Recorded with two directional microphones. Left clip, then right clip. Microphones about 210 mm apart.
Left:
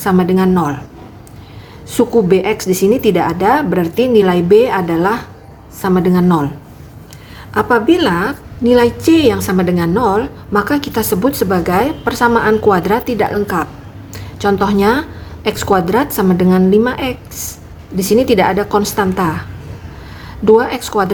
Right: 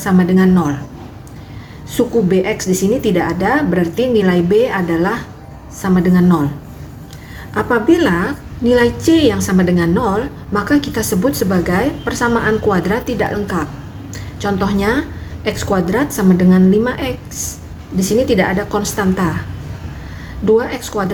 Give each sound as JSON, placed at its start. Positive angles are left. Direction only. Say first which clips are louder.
{"t": 0.0, "sound": "a woman's voice", "louder": "left 2 dB", "side_deg": 25}
{"t": 1.9, "sound": "a woman's voice", "louder": "left 3 dB", "side_deg": 30}
{"t": 7.5, "sound": "a woman's voice", "louder": "left 2 dB", "side_deg": 20}
{"t": 20.4, "sound": "a woman's voice", "louder": "left 4 dB", "side_deg": 30}